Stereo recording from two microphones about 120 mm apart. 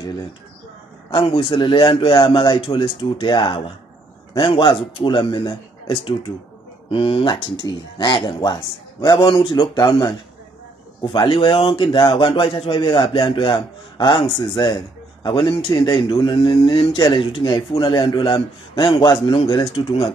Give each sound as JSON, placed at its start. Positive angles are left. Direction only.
{"t": 1.1, "sound": "a man's voice", "side_deg": 50}